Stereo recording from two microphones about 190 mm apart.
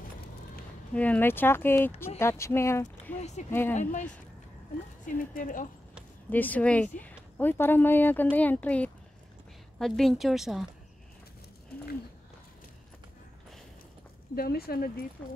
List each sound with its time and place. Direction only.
0.9 s speech: 10° left (ahead or behind)
3.2 s speech: 35° left (ahead or behind)
3.4 s speech: 10° left (ahead or behind)
3.7 s speech: 40° left (ahead or behind)
6.3 s a woman's voice: 10° left (ahead or behind)
14.3 s speech: 55° left (ahead or behind)